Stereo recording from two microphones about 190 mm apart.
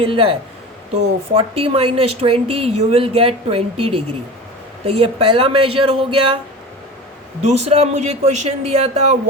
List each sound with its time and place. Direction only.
0.0 s a woman's voice: 30° right (ahead or behind)
7.5 s a woman's voice: 35° right (ahead or behind)